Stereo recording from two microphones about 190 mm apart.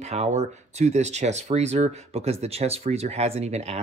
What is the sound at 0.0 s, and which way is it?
Speech, 35° right (ahead or behind).